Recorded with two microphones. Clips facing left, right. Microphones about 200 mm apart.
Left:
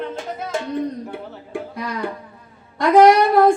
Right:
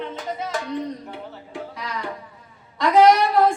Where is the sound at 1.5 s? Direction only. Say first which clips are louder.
Left 7 dB; 50° left (ahead or behind).